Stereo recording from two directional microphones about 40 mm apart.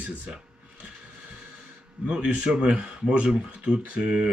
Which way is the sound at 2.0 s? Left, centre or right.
Right.